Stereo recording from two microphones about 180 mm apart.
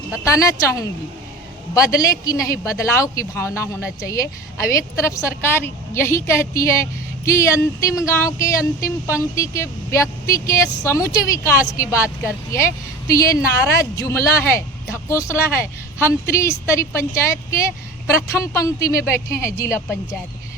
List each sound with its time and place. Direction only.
0.3 s speech: 15° left (ahead or behind)